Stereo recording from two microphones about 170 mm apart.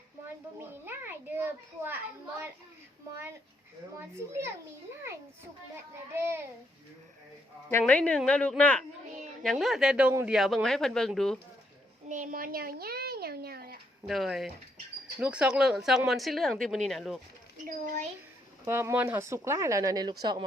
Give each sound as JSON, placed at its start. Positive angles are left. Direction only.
{"t": 0.9, "sound": "a child's voice", "side_deg": -15}
{"t": 7.7, "sound": "a woman's voice", "side_deg": 10}
{"t": 12.0, "sound": "a child's voice", "side_deg": -50}
{"t": 14.1, "sound": "speech", "side_deg": 0}
{"t": 17.7, "sound": "speech", "side_deg": -45}
{"t": 18.6, "sound": "speech", "side_deg": -15}